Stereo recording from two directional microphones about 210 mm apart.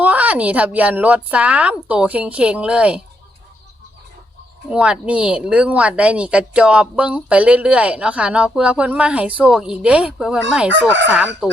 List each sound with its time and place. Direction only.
0.0 s a woman's voice: 5° right (ahead or behind)
4.7 s speech: 5° right (ahead or behind)